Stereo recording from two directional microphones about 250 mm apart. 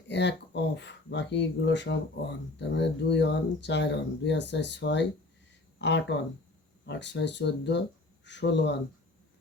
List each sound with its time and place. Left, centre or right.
0.1 s speech: left